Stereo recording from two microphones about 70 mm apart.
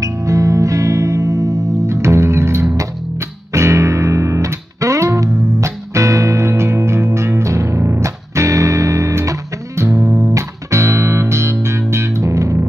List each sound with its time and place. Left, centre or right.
0.0 s music: right
1.9 s music: right